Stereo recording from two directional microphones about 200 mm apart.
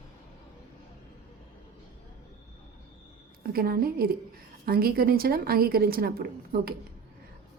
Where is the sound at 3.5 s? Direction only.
50° right (ahead or behind).